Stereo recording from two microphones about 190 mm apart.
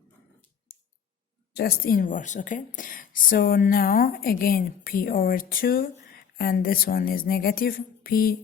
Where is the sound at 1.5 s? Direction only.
50° left (ahead or behind).